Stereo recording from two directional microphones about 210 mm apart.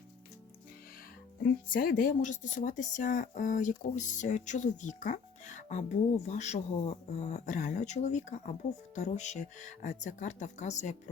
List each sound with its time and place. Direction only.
1.7 s speech: 40° left (ahead or behind)